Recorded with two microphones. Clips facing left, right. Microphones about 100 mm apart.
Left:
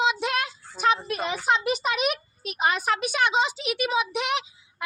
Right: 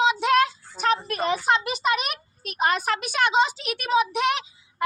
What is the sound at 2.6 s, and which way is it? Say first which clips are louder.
Speech: right 1 dB; 55° right (ahead or behind).